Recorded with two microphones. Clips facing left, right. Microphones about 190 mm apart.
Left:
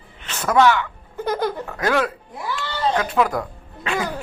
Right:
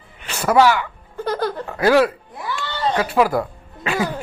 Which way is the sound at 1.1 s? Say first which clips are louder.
Even; 20° left (ahead or behind).